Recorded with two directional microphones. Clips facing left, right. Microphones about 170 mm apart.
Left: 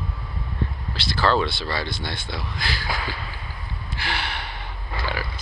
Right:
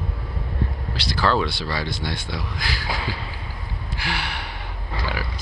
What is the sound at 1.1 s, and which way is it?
Speech, 10° right (ahead or behind).